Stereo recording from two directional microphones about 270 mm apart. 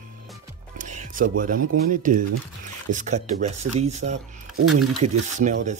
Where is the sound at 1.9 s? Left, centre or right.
Right.